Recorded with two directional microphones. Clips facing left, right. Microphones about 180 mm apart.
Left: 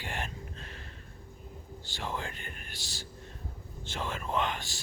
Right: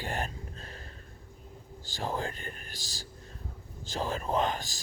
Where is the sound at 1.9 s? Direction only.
35° right (ahead or behind).